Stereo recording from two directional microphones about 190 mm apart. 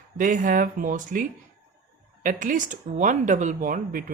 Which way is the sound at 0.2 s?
45° right (ahead or behind).